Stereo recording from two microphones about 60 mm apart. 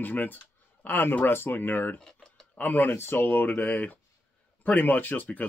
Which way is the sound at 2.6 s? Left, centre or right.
Left.